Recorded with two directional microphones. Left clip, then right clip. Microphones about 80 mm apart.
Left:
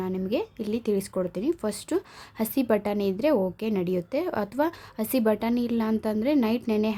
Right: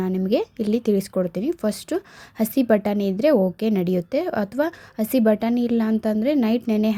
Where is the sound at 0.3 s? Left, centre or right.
Right.